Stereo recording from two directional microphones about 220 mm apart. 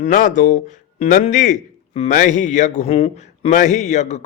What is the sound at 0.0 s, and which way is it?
Speech, 35° left (ahead or behind).